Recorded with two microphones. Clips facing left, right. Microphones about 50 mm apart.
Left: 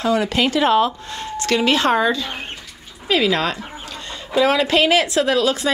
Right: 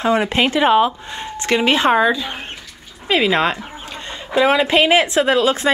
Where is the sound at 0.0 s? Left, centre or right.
Right; by 2.3 s centre.